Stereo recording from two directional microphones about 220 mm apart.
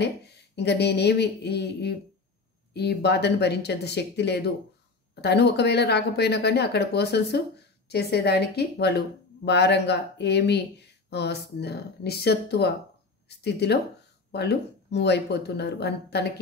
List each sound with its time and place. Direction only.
0.0 s speech: 50° left (ahead or behind)